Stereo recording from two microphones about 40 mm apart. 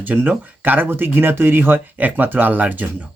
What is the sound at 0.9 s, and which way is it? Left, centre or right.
A man's voice, right.